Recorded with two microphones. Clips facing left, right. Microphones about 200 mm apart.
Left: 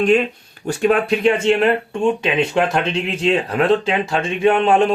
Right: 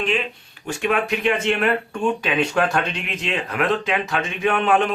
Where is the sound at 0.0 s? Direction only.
45° left (ahead or behind).